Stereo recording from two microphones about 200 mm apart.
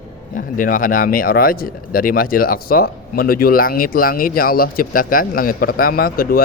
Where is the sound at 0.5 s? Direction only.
45° left (ahead or behind).